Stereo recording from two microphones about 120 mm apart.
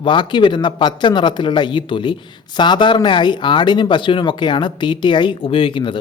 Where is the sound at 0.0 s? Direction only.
40° left (ahead or behind).